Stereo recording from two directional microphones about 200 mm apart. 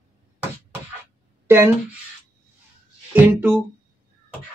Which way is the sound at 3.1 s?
10° right (ahead or behind).